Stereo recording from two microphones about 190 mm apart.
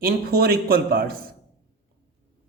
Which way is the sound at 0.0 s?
55° right (ahead or behind).